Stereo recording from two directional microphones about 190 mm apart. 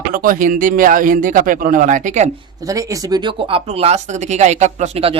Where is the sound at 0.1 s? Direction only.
45° right (ahead or behind).